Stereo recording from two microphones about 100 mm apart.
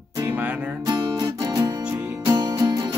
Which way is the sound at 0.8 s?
45° right (ahead or behind).